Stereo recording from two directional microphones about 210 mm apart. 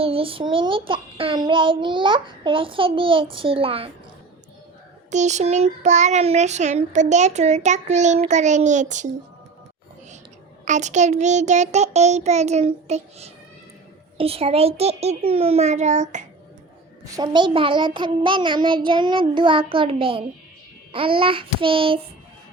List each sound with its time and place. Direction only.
0.0 s a child's voice: 25° right (ahead or behind)
5.1 s child singing: 35° right (ahead or behind)
10.7 s child singing: 35° right (ahead or behind)
14.2 s a child's voice: 25° right (ahead or behind)
17.2 s a child's voice: 20° right (ahead or behind)